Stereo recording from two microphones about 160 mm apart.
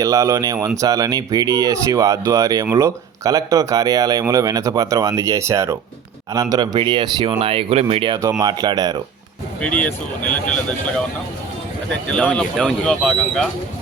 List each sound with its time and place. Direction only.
0.0 s speech: 20° right (ahead or behind)
8.2 s speech: 20° right (ahead or behind)
9.6 s speech: 10° left (ahead or behind)
12.1 s speech: 5° left (ahead or behind)